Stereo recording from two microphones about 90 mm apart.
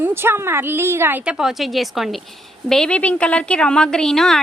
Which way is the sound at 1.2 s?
5° right (ahead or behind).